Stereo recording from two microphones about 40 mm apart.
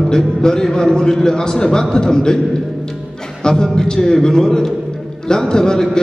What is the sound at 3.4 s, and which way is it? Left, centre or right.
A man's voice, centre.